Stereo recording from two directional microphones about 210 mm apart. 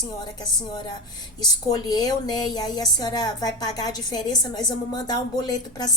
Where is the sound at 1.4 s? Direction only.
20° left (ahead or behind).